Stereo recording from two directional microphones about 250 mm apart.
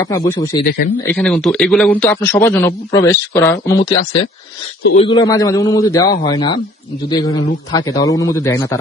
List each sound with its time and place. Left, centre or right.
0.0 s speech: centre
4.9 s speech: centre